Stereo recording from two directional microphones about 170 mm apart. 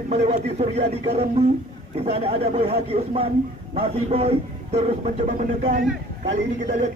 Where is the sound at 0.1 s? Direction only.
40° right (ahead or behind).